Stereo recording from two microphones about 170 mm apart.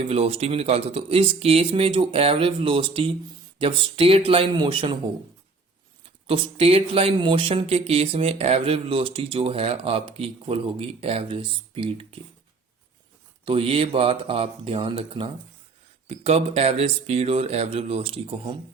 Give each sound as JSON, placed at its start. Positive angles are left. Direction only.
{"t": 0.0, "sound": "speech", "side_deg": -35}
{"t": 6.2, "sound": "speech", "side_deg": -30}
{"t": 13.4, "sound": "speech", "side_deg": -30}